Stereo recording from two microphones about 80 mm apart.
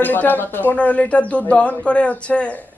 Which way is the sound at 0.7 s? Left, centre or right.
Centre.